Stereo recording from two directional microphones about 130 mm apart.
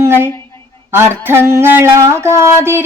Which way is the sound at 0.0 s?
20° right (ahead or behind).